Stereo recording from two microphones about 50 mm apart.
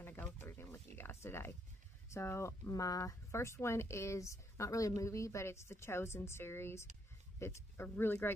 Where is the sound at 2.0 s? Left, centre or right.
Left.